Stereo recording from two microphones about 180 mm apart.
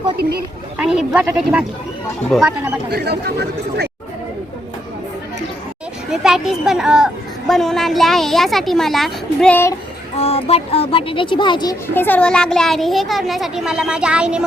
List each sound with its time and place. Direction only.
0.2 s speech: 60° right (ahead or behind)
0.8 s a woman's voice: 5° right (ahead or behind)
2.9 s speech: 60° right (ahead or behind)
6.1 s a woman's voice: centre (ahead or behind)
10.2 s speech: 35° left (ahead or behind)
11.9 s a woman's voice: 10° left (ahead or behind); by 14.4 s 5° right (ahead or behind)